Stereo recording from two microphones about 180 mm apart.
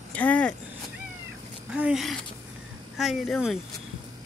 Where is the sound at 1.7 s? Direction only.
5° right (ahead or behind).